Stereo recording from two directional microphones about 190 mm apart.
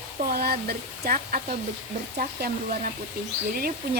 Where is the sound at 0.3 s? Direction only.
55° right (ahead or behind).